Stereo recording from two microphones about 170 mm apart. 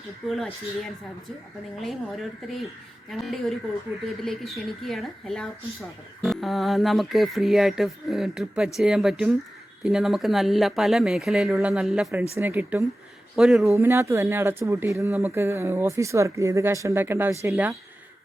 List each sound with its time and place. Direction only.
0.3 s speech: centre (ahead or behind)
13.3 s speech: centre (ahead or behind)
13.7 s speech: 15° right (ahead or behind)